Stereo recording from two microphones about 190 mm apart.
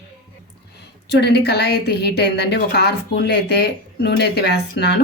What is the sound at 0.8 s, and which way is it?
A woman's voice, 60° left (ahead or behind).